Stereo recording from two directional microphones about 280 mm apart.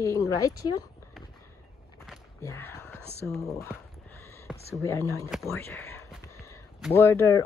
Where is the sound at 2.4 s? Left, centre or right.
Centre.